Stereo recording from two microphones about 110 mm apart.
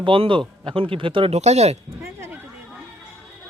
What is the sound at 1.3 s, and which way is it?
Speech, 90° right.